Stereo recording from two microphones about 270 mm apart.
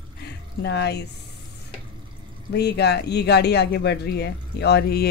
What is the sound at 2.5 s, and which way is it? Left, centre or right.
Speech, left.